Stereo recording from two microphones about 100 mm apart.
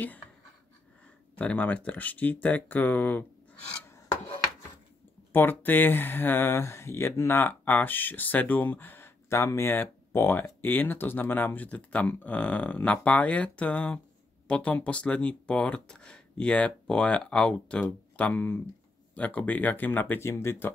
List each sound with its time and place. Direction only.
1.3 s speech: 15° left (ahead or behind)
5.3 s speech: 20° left (ahead or behind)